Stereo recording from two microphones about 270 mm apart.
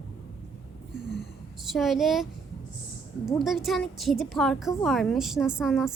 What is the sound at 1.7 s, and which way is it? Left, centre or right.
Speech, centre.